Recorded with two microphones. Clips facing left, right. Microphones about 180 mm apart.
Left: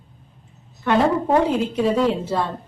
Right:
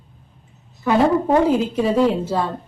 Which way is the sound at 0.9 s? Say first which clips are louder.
Right 2 dB; 5° right (ahead or behind).